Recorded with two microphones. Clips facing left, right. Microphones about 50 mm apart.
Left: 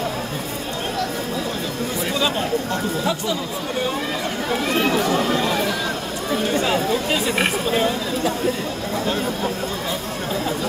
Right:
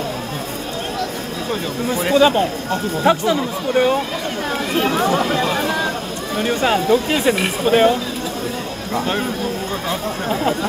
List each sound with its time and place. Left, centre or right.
2.0 s speech: right
5.3 s a sound: right
6.6 s speech: right